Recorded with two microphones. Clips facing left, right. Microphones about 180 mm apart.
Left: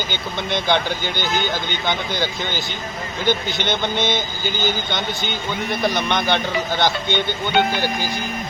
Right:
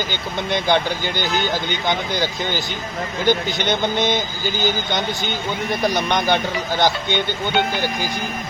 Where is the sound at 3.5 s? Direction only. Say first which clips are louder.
Right 2 dB; 40° right (ahead or behind).